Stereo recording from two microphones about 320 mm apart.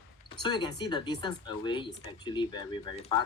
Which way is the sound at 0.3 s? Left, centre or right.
Centre.